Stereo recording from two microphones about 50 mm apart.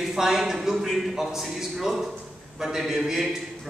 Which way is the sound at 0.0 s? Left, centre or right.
Centre.